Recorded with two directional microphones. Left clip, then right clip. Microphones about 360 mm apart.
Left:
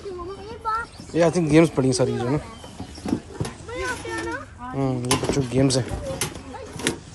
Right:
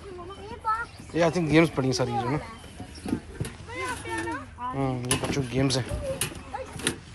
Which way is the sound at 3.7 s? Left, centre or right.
Left.